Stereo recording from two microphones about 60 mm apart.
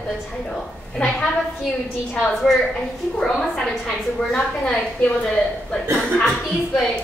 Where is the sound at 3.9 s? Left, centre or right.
Centre.